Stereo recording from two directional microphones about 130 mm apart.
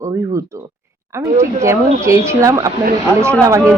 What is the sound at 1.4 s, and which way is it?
Speech, 20° right (ahead or behind).